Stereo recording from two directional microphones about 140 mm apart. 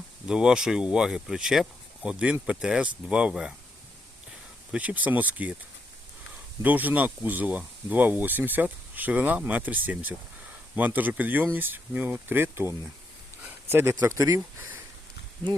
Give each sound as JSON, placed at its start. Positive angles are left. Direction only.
{"t": 0.3, "sound": "speech", "side_deg": -5}
{"t": 4.7, "sound": "speech", "side_deg": -10}
{"t": 6.6, "sound": "speech", "side_deg": -10}